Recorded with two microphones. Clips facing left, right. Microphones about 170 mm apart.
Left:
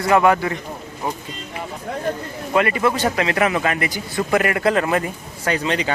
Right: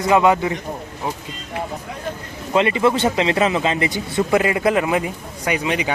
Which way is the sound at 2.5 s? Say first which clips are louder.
Right 2 dB; 20° right (ahead or behind).